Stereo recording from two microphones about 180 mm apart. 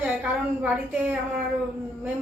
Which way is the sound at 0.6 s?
10° right (ahead or behind).